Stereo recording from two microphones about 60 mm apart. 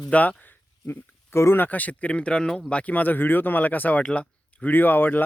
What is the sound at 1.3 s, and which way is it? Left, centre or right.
Speech, left.